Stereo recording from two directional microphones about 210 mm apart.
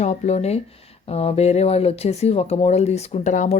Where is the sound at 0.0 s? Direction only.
30° left (ahead or behind).